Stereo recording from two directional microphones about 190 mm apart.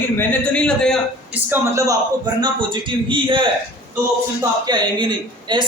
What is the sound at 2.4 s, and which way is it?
A man's voice, 25° right (ahead or behind).